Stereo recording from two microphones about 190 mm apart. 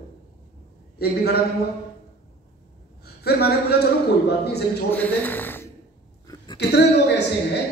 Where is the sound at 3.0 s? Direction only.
55° left (ahead or behind).